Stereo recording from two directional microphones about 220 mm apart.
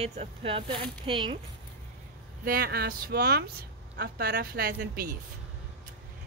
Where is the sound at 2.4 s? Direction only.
40° right (ahead or behind).